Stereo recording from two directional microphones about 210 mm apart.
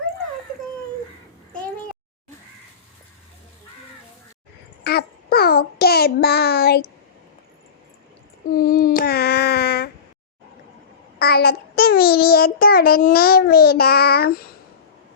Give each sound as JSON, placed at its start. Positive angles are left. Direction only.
{"t": 4.8, "sound": "a child's voice", "side_deg": 50}
{"t": 8.5, "sound": "child singing", "side_deg": 45}
{"t": 11.2, "sound": "child singing", "side_deg": 45}